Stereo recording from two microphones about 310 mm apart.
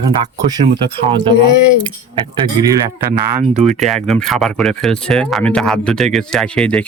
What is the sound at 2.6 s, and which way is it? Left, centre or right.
Speech, centre.